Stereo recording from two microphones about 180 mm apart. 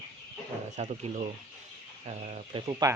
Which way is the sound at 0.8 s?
35° right (ahead or behind).